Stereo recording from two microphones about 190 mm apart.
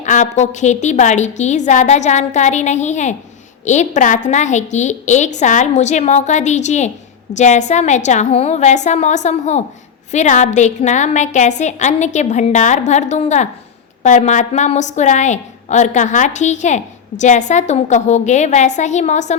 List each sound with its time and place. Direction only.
0.0 s a woman's voice: 40° left (ahead or behind)